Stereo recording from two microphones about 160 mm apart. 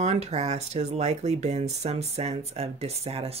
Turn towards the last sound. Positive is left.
turn(degrees=-40)  # may be behind; listen again after turning